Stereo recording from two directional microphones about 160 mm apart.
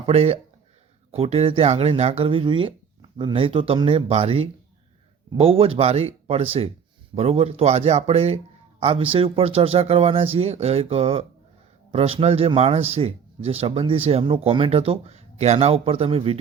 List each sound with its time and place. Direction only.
0.0 s speech: 35° right (ahead or behind)